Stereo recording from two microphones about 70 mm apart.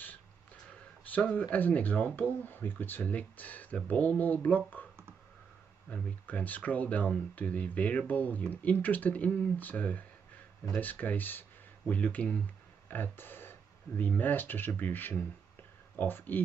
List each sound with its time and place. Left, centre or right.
1.0 s speech: left
5.9 s speech: centre
12.8 s speech: left